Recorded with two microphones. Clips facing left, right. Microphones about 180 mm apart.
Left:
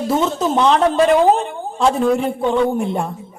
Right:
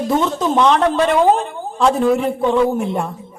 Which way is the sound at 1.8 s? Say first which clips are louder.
Right 1 dB; centre (ahead or behind).